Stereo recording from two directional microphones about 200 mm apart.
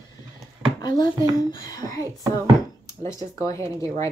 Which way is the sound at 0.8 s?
20° left (ahead or behind).